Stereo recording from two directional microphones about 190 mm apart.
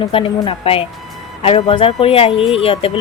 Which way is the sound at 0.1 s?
30° left (ahead or behind).